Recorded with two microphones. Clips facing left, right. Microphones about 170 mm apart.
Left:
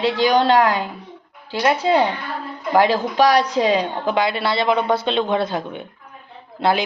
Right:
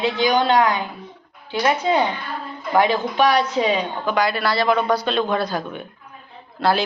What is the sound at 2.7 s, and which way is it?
A woman's voice, 35° left (ahead or behind).